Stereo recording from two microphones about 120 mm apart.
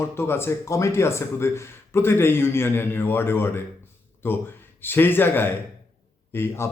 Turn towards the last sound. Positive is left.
turn(degrees=20)  # may be behind; listen again after turning